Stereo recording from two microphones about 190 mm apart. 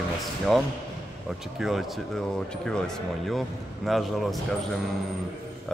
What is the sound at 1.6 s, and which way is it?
Speech, centre (ahead or behind).